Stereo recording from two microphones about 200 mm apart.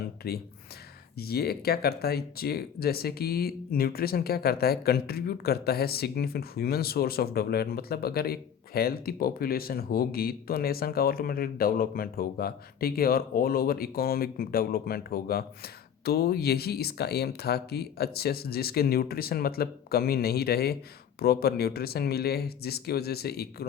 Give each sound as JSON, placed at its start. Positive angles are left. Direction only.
{"t": 0.2, "sound": "speech", "side_deg": 50}